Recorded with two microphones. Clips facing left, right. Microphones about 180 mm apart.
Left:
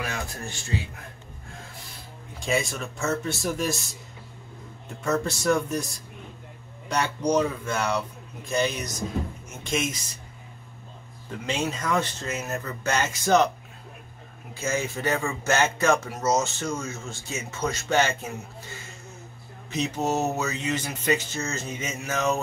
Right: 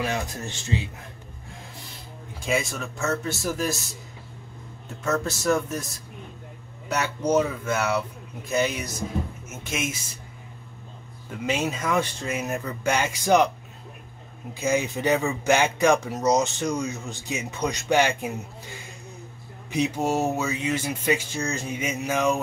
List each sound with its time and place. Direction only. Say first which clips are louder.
0.0 s a man's voice: right 4 dB; 20° right (ahead or behind)
2.4 s speech: even; centre (ahead or behind)
4.8 s speech: even; centre (ahead or behind)
6.9 s speech: right 1 dB; 5° right (ahead or behind)
11.2 s speech: right 2 dB; 10° right (ahead or behind)
14.5 s speech: right 4 dB; 15° right (ahead or behind)
19.7 s speech: right 2 dB; 10° right (ahead or behind)